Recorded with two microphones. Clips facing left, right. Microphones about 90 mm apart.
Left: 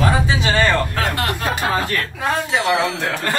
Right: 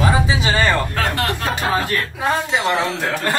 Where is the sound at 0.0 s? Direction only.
5° right (ahead or behind).